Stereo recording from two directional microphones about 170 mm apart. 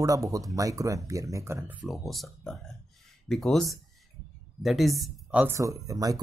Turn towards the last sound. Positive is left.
turn(degrees=-20)  # may be behind; listen again after turning